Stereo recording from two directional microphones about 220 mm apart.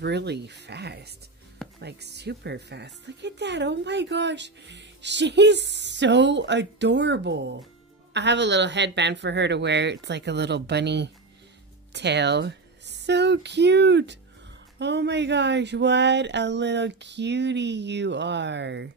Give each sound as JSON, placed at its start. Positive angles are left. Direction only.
{"t": 0.0, "sound": "speech", "side_deg": -50}